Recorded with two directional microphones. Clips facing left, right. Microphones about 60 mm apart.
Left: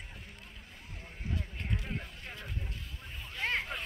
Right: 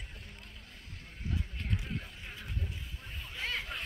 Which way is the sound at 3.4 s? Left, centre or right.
Left.